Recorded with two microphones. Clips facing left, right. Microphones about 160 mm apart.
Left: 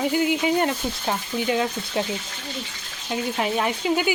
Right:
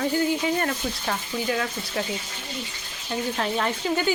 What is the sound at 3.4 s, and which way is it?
Speech, 10° left (ahead or behind).